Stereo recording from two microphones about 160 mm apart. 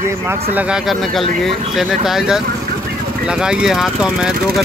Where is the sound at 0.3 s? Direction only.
10° right (ahead or behind).